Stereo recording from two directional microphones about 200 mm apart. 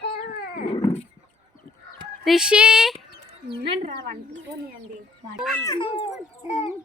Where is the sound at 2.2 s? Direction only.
5° right (ahead or behind).